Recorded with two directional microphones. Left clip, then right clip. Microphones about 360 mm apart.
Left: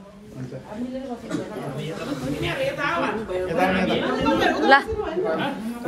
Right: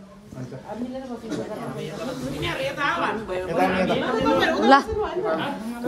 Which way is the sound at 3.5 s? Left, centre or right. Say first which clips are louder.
Even; centre.